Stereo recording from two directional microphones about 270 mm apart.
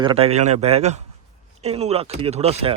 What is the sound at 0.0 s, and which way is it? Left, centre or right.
Speech, right.